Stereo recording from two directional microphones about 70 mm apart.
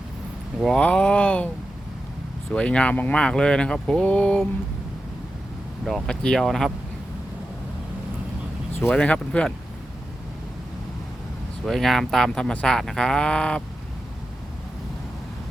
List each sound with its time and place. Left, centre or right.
0.8 s speech: centre
2.5 s speech: centre
5.8 s speech: centre
8.9 s speech: centre
11.6 s speech: centre